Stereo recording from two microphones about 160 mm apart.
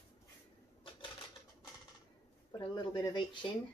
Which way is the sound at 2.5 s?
25° left (ahead or behind).